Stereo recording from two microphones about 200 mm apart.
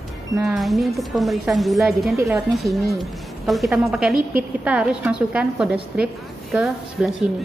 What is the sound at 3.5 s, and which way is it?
A woman's voice, centre (ahead or behind).